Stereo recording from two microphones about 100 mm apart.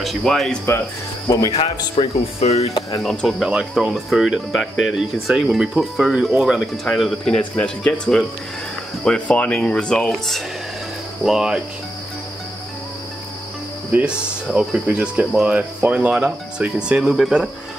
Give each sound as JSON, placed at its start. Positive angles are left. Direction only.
{"t": 0.0, "sound": "speech", "side_deg": 0}
{"t": 1.2, "sound": "speech", "side_deg": 40}
{"t": 2.0, "sound": "speech", "side_deg": 90}
{"t": 3.0, "sound": "speech", "side_deg": 5}
{"t": 11.2, "sound": "speech", "side_deg": -5}
{"t": 13.9, "sound": "speech", "side_deg": -10}